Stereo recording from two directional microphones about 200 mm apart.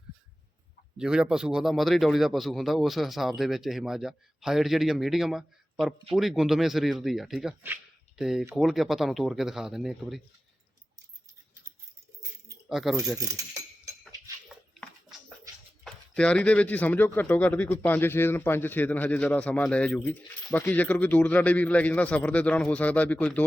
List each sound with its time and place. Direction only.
0.9 s a man's voice: 5° right (ahead or behind)
12.6 s speech: centre (ahead or behind)
13.0 s speech: 15° right (ahead or behind)
15.8 s speech: 5° left (ahead or behind)